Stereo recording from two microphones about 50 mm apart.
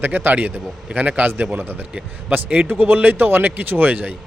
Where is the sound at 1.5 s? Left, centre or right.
Right.